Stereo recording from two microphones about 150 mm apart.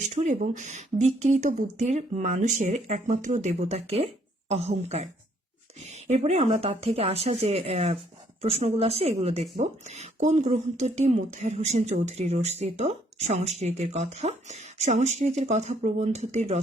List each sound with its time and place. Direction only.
0.2 s speech: 50° right (ahead or behind)